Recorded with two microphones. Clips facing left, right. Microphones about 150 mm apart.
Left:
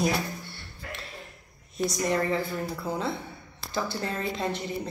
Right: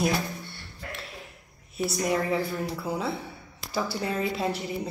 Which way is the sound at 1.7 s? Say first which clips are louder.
Even; 5° right (ahead or behind).